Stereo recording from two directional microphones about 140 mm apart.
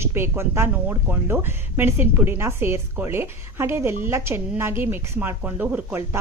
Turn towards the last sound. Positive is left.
turn(degrees=-15)  # may be behind; listen again after turning